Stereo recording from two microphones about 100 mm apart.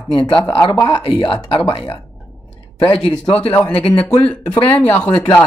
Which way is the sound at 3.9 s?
15° left (ahead or behind).